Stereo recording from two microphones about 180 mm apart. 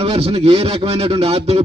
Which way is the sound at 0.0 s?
35° right (ahead or behind).